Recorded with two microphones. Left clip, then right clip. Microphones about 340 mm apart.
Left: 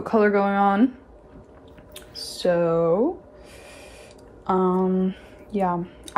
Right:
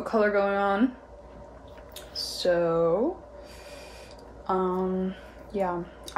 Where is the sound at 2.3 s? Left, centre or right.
Left.